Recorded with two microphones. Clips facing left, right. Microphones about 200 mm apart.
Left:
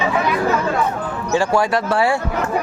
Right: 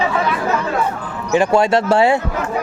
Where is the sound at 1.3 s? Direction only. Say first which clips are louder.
Right 4 dB; 20° right (ahead or behind).